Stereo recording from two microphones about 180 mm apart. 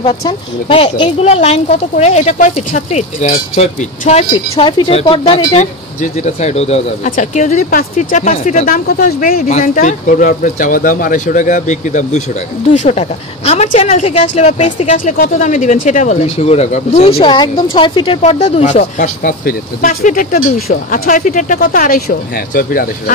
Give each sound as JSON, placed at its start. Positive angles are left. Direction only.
{"t": 0.0, "sound": "speech", "side_deg": 30}